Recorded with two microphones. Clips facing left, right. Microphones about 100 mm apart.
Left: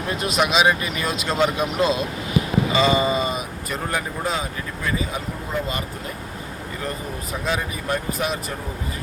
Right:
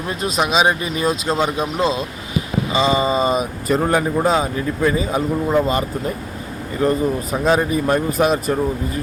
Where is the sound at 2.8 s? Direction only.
30° right (ahead or behind).